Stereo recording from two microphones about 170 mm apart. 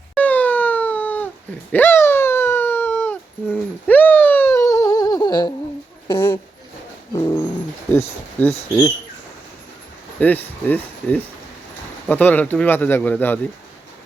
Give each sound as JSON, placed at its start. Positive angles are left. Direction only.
{"t": 0.1, "sound": "a sound", "side_deg": 10}
{"t": 7.2, "sound": "dog", "side_deg": 20}
{"t": 7.9, "sound": "speech", "side_deg": 10}
{"t": 10.2, "sound": "speech", "side_deg": 10}